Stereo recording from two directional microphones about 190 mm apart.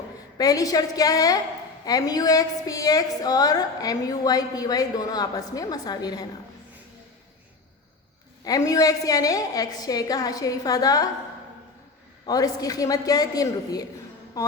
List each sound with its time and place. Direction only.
0.3 s a woman's voice: 20° left (ahead or behind)
8.4 s a woman's voice: 20° left (ahead or behind)
12.2 s a woman's voice: 20° left (ahead or behind)
14.4 s a sound: 15° left (ahead or behind)